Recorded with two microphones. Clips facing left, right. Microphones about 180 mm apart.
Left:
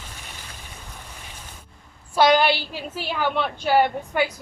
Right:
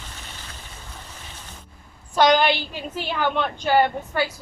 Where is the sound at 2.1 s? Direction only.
5° left (ahead or behind).